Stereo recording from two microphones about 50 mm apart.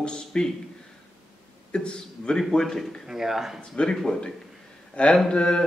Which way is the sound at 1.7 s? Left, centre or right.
Centre.